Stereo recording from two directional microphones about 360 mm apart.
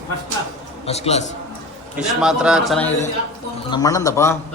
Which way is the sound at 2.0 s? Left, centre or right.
Centre.